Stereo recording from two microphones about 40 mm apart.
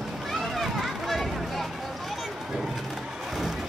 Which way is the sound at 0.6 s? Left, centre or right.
Centre.